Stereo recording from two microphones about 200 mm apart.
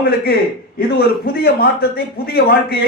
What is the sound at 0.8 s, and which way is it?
A man's voice, 50° left (ahead or behind).